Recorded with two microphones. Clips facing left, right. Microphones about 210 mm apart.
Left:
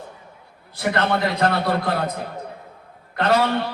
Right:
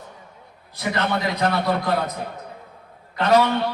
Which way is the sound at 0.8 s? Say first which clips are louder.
Left 3 dB; 55° left (ahead or behind).